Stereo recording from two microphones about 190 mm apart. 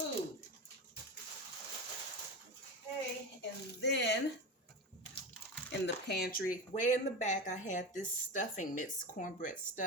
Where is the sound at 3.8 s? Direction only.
60° left (ahead or behind).